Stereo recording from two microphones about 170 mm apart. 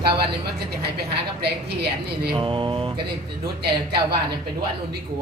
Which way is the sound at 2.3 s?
30° right (ahead or behind).